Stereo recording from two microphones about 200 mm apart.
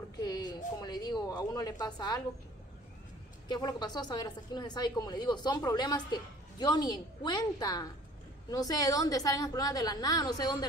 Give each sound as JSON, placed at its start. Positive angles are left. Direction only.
{"t": 0.2, "sound": "speech", "side_deg": 20}
{"t": 3.4, "sound": "a woman's voice", "side_deg": 20}